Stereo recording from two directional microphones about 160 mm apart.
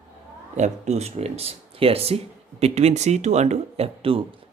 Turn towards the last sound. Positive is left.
turn(degrees=-35)  # may be behind; listen again after turning